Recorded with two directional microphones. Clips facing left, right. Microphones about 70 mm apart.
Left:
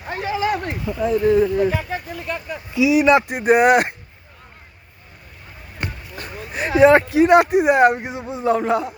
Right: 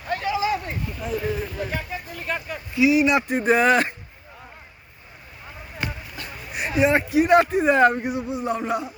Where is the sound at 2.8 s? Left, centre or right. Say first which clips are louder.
Left 1 dB; left.